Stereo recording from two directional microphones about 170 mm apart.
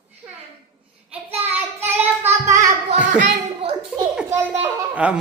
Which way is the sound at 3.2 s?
35° right (ahead or behind).